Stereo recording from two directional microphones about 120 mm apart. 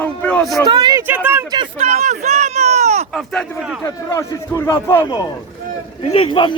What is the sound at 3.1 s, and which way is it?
Speech, 5° left (ahead or behind).